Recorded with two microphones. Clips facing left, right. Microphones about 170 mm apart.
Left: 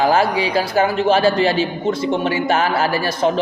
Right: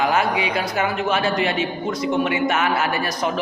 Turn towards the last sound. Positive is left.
turn(degrees=30)  # may be behind; listen again after turning